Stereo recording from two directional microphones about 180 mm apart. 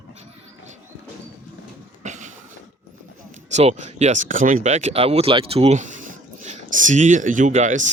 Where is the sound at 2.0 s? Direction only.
40° right (ahead or behind).